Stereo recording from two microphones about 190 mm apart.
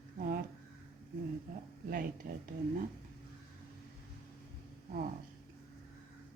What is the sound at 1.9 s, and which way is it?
Speech, 50° right (ahead or behind).